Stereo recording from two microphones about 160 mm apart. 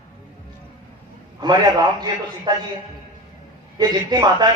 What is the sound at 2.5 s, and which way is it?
Speech, 30° right (ahead or behind).